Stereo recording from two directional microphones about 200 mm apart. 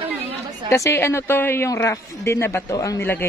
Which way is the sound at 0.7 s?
15° left (ahead or behind).